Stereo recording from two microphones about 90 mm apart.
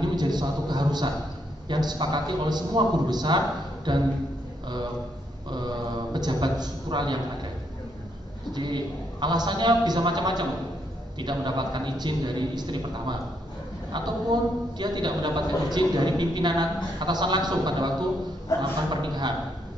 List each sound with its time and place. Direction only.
0.0 s a man's voice: 50° right (ahead or behind)
5.5 s a man's voice: 55° right (ahead or behind)
8.5 s a man's voice: 55° right (ahead or behind)